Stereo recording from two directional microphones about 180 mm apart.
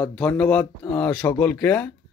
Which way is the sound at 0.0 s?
5° left (ahead or behind).